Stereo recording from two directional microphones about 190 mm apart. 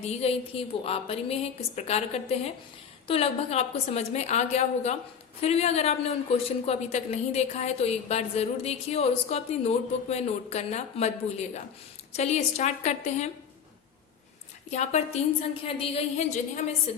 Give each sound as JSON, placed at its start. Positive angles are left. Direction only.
{"t": 0.0, "sound": "speech", "side_deg": 35}
{"t": 14.7, "sound": "speech", "side_deg": 35}